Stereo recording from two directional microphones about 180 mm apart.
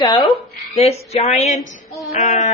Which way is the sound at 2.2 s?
40° left (ahead or behind).